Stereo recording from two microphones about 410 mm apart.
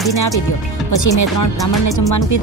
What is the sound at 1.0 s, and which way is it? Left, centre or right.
Speech, left.